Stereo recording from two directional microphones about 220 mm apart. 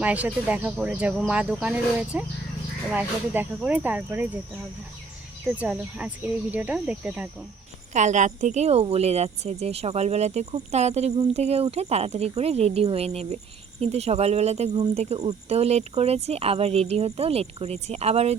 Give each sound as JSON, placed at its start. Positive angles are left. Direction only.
{"t": 0.0, "sound": "speech", "side_deg": -5}
{"t": 5.5, "sound": "speech", "side_deg": -5}
{"t": 7.9, "sound": "speech", "side_deg": -30}